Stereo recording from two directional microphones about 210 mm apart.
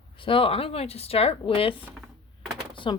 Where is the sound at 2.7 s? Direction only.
25° left (ahead or behind).